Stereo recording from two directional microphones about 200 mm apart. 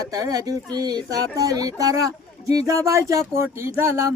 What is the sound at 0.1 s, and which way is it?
Speech, 20° right (ahead or behind).